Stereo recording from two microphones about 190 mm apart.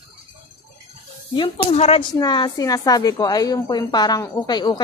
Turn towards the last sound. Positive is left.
turn(degrees=20)  # may be behind; listen again after turning